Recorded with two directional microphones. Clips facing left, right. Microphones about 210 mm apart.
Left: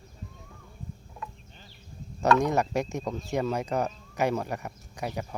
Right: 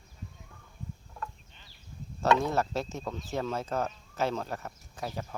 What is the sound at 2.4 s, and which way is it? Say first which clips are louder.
Speech: left 4 dB; 15° left (ahead or behind).